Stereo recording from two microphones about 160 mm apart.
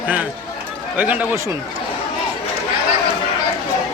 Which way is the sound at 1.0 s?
10° right (ahead or behind).